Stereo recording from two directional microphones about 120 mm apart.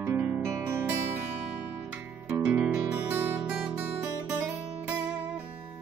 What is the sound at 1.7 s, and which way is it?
Music, 15° right (ahead or behind).